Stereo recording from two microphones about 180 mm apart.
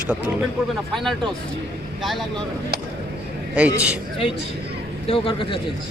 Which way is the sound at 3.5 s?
5° right (ahead or behind).